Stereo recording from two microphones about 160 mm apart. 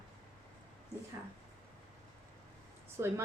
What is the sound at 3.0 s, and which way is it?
Speech, 20° right (ahead or behind).